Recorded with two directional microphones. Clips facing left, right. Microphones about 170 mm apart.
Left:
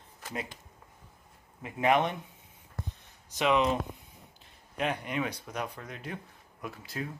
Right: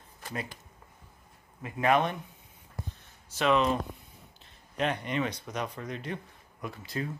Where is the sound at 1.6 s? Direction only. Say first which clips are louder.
Even; 20° left (ahead or behind).